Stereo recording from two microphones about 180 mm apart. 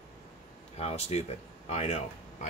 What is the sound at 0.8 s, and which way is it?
Speech, 35° left (ahead or behind).